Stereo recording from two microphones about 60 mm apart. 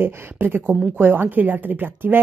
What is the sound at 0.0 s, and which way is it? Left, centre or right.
Speech, right.